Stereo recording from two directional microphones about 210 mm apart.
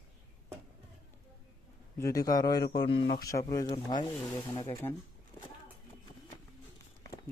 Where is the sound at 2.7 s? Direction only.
20° left (ahead or behind).